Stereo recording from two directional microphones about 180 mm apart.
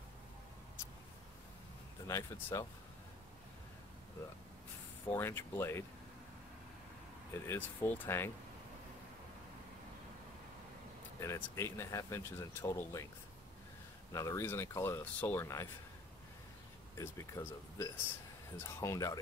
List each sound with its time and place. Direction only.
2.0 s speech: 15° left (ahead or behind)
5.1 s speech: 15° left (ahead or behind)
7.3 s speech: 15° left (ahead or behind)
11.1 s speech: 15° left (ahead or behind)
14.1 s speech: 15° left (ahead or behind)
17.0 s speech: 15° left (ahead or behind)